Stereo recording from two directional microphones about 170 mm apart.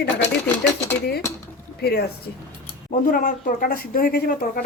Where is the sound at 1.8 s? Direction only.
70° left (ahead or behind).